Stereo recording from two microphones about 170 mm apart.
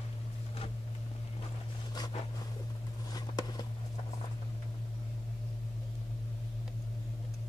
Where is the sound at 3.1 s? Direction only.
25° left (ahead or behind).